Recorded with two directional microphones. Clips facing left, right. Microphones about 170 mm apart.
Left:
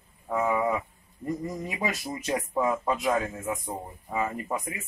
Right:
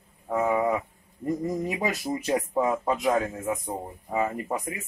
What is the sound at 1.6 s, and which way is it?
A man's voice, 40° right (ahead or behind).